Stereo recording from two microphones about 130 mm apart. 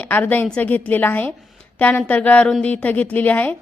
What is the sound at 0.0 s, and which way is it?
A woman's voice, 10° left (ahead or behind).